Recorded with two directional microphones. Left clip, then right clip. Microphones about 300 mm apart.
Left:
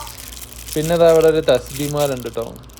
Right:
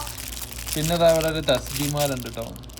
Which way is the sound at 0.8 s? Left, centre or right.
Centre.